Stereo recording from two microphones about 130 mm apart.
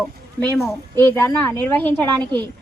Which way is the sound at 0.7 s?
20° left (ahead or behind).